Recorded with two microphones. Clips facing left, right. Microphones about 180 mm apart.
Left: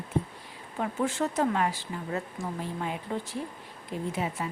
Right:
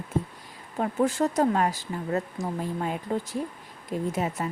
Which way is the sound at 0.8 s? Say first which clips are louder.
Right 4 dB; 35° right (ahead or behind).